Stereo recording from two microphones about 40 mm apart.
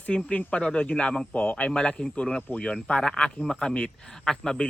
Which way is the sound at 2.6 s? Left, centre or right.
Left.